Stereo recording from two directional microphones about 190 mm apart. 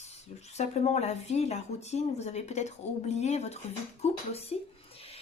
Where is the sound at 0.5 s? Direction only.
35° left (ahead or behind).